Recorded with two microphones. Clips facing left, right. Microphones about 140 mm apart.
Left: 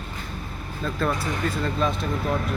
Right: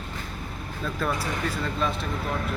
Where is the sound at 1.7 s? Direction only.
Centre (ahead or behind).